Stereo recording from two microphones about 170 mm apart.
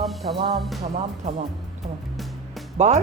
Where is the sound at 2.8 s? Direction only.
40° right (ahead or behind).